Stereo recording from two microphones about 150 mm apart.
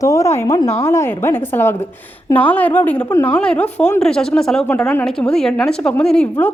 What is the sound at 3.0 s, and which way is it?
Speech, 25° left (ahead or behind).